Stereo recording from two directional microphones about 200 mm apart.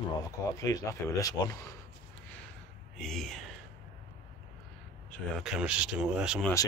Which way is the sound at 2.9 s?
Centre (ahead or behind).